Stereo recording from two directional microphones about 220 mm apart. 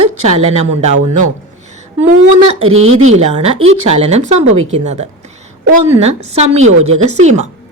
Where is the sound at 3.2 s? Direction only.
30° right (ahead or behind).